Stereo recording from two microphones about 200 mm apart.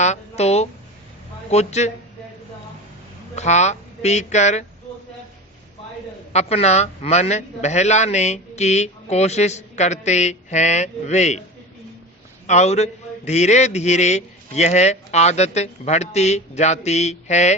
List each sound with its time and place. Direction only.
0.0 s a sound: 35° left (ahead or behind)
1.5 s a man's voice: 35° left (ahead or behind)
3.3 s a man's voice: 35° left (ahead or behind)
6.3 s a man's voice: 30° left (ahead or behind)
12.5 s a man's voice: 35° left (ahead or behind)